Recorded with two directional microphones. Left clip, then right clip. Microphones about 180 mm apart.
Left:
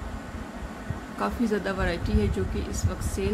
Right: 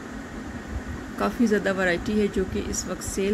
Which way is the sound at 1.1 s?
10° right (ahead or behind).